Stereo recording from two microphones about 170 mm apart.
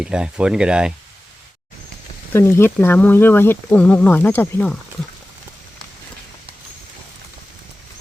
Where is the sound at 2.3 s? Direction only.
15° left (ahead or behind).